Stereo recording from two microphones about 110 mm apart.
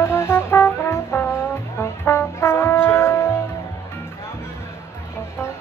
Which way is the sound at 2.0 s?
25° left (ahead or behind).